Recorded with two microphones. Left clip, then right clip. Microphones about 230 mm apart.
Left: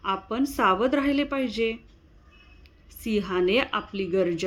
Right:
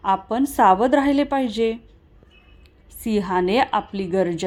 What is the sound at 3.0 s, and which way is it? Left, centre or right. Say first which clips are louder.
A woman's voice: right 4 dB; centre.